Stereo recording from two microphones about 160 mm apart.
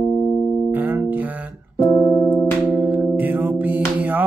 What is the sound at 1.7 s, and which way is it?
Music, 25° left (ahead or behind).